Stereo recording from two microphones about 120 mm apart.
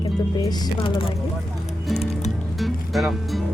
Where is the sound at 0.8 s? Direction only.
50° left (ahead or behind).